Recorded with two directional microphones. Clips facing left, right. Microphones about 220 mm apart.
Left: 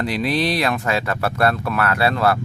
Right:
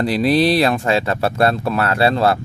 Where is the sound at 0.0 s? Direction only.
35° right (ahead or behind).